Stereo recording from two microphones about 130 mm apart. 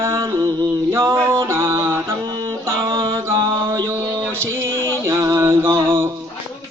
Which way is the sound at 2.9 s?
40° right (ahead or behind).